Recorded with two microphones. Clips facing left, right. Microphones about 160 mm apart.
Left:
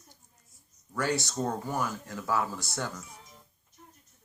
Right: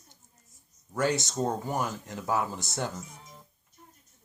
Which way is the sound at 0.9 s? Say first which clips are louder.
Right 2 dB; 20° right (ahead or behind).